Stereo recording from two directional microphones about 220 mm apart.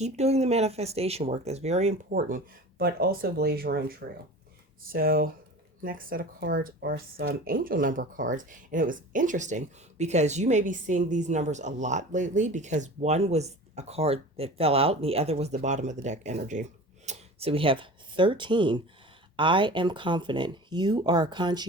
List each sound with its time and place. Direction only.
0.0 s speech: 30° right (ahead or behind)
2.0 s speech: 40° right (ahead or behind); by 21.7 s 20° right (ahead or behind)